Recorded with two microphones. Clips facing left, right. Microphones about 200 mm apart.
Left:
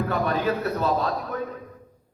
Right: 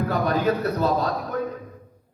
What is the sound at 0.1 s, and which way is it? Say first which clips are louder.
A man's voice: right 4 dB; 40° right (ahead or behind).